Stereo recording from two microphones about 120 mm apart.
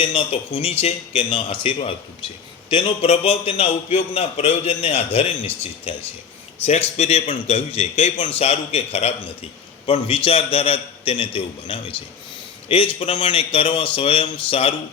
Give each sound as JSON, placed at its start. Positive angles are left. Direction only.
{"t": 0.0, "sound": "a man's voice", "side_deg": 50}
{"t": 8.1, "sound": "a man's voice", "side_deg": 50}